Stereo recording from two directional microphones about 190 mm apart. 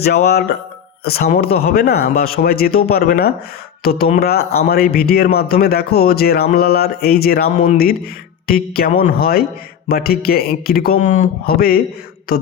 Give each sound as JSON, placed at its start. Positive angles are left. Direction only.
{"t": 0.0, "sound": "speech", "side_deg": 55}